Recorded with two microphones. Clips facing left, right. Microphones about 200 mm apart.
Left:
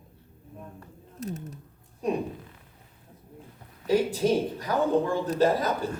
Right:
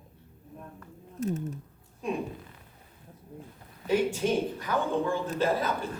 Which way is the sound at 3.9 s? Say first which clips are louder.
Left 3 dB; 35° left (ahead or behind).